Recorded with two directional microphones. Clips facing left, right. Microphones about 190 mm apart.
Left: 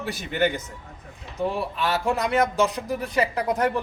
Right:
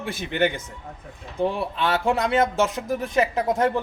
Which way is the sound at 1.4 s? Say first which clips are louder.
Right 2 dB; 30° right (ahead or behind).